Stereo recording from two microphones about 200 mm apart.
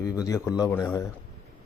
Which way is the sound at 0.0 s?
15° left (ahead or behind).